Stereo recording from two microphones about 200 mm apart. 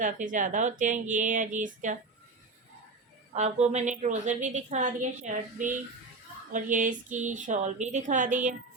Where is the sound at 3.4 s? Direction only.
30° right (ahead or behind).